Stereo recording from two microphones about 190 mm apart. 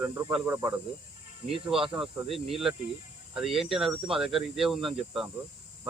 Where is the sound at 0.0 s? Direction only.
15° right (ahead or behind).